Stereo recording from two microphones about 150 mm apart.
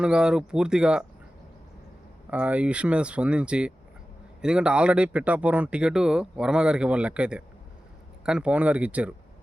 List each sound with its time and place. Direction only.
0.0 s speech: 5° right (ahead or behind)
2.3 s speech: 10° right (ahead or behind)